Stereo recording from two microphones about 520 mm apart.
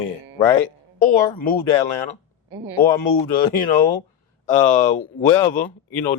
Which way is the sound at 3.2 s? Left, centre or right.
Left.